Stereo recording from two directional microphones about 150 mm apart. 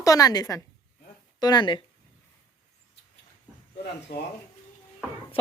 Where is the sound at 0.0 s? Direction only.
25° left (ahead or behind).